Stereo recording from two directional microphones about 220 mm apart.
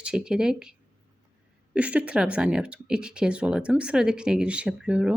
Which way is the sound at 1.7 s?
5° right (ahead or behind).